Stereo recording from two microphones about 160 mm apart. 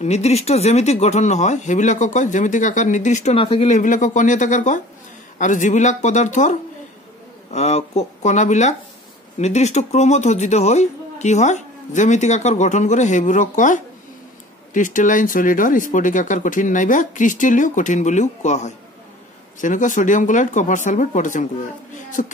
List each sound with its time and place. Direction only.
0.0 s speech: 45° left (ahead or behind)
7.5 s speech: 45° left (ahead or behind)